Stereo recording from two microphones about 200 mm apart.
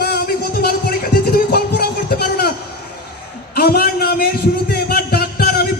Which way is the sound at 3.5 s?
50° left (ahead or behind).